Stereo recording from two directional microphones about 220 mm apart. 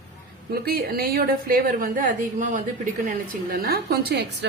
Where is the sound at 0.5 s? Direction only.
45° right (ahead or behind).